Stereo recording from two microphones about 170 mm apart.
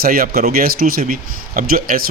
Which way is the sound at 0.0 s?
60° right (ahead or behind).